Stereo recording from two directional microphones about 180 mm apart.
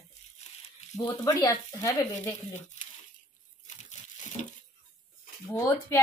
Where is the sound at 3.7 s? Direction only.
40° left (ahead or behind).